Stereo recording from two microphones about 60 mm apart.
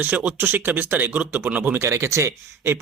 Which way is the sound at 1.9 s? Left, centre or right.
Right.